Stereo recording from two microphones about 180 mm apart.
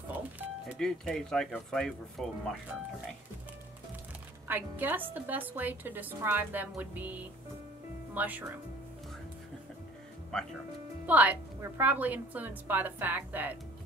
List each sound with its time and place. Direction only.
0.1 s music: 10° right (ahead or behind)
0.7 s speech: 5° left (ahead or behind)
4.5 s a woman's voice: 10° right (ahead or behind)
11.1 s a woman's voice: 10° right (ahead or behind)